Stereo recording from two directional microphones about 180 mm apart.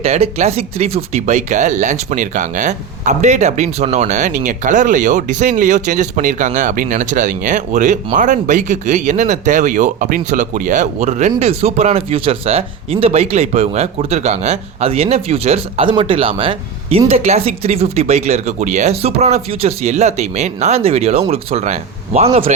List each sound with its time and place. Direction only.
0.0 s speech: 35° right (ahead or behind)